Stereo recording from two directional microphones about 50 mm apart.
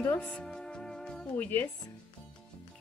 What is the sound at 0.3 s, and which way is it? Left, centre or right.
Music, centre.